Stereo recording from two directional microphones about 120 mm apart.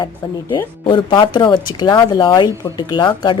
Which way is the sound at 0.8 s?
45° left (ahead or behind).